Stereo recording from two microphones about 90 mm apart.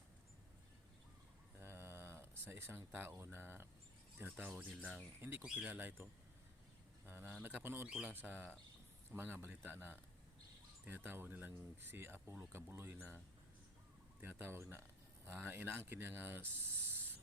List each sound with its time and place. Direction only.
1.5 s a sound: 25° right (ahead or behind)
4.2 s speech: 20° right (ahead or behind)
7.9 s speech: 10° right (ahead or behind)
8.1 s speech: 25° right (ahead or behind)
14.2 s speech: 25° right (ahead or behind)